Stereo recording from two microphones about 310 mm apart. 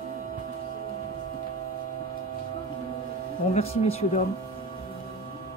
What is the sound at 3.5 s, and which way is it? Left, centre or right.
Speech, centre.